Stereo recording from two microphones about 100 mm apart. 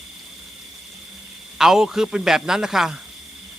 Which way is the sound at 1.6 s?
5° right (ahead or behind).